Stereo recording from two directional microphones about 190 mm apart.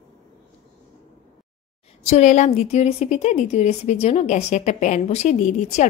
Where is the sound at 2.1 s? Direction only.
40° left (ahead or behind).